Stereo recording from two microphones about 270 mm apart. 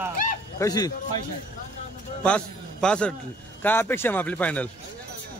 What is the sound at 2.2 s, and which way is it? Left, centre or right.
A man's voice, centre.